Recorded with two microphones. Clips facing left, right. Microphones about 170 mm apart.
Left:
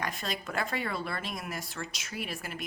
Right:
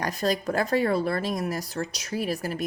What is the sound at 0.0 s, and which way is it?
Speech, 40° right (ahead or behind).